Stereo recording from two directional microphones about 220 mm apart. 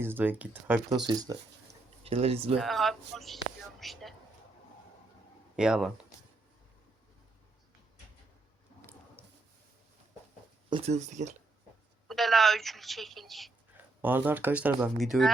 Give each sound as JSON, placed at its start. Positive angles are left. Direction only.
{"t": 0.0, "sound": "speech", "side_deg": -10}
{"t": 2.6, "sound": "a woman's voice", "side_deg": 0}
{"t": 3.8, "sound": "a sound", "side_deg": 0}
{"t": 5.5, "sound": "a woman's voice", "side_deg": -5}
{"t": 10.7, "sound": "speech", "side_deg": -25}
{"t": 12.0, "sound": "a woman's voice", "side_deg": 0}